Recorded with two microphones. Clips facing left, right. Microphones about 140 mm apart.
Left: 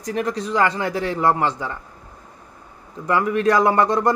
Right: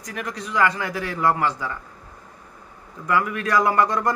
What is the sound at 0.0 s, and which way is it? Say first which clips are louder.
A man's voice: left 8 dB; 30° left (ahead or behind).